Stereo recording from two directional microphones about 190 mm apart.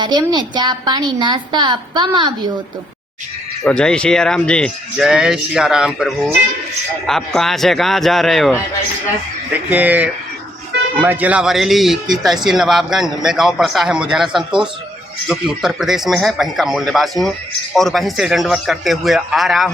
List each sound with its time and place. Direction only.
0.0 s a woman's voice: 25° right (ahead or behind)
3.6 s speech: 5° left (ahead or behind)
9.6 s speech: 10° right (ahead or behind)